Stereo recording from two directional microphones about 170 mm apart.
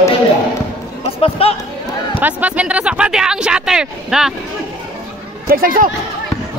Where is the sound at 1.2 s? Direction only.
35° left (ahead or behind).